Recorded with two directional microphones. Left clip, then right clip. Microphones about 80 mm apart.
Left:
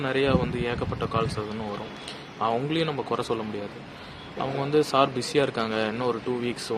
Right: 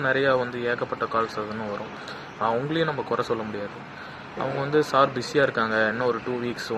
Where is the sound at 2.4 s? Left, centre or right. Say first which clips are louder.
Right 1 dB; left.